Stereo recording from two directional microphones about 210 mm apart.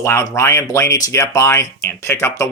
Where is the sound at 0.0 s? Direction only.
15° left (ahead or behind).